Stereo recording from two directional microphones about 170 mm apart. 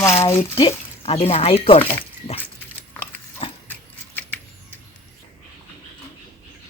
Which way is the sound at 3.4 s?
35° left (ahead or behind).